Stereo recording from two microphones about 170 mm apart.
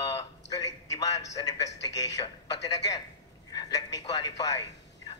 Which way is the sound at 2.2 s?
25° left (ahead or behind).